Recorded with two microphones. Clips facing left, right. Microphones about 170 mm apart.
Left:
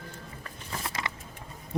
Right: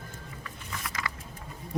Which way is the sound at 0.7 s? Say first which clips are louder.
Left 2 dB; 30° left (ahead or behind).